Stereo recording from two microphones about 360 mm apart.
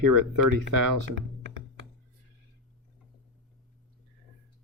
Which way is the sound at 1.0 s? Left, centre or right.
Right.